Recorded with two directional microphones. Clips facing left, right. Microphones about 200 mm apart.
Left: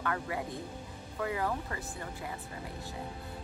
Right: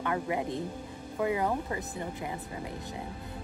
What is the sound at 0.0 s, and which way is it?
A woman's voice, 20° right (ahead or behind).